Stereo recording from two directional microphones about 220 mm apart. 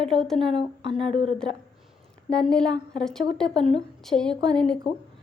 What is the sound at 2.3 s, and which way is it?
A woman's voice, 5° left (ahead or behind).